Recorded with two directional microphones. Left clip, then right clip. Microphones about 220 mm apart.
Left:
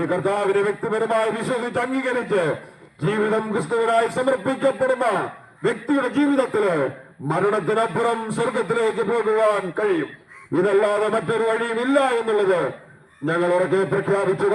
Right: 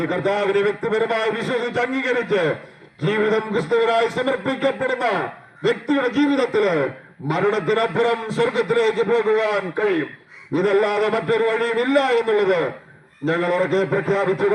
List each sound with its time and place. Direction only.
0.1 s a man's voice: 35° right (ahead or behind)